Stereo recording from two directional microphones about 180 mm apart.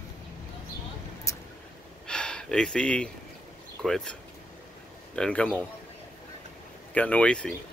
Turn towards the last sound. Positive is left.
turn(degrees=5)  # may be behind; listen again after turning